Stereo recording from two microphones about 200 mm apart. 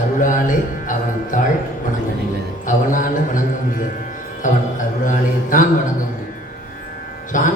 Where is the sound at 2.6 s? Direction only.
40° left (ahead or behind).